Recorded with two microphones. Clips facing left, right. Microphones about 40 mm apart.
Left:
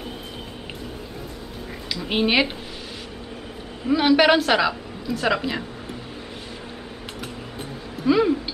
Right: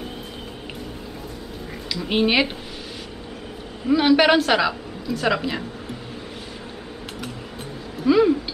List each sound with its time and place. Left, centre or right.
2.0 s a woman's voice: centre
3.8 s a woman's voice: centre
8.0 s a sound: centre